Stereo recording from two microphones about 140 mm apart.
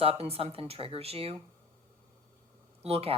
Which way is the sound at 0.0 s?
45° right (ahead or behind).